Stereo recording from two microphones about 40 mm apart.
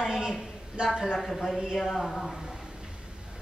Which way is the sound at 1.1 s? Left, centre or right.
Centre.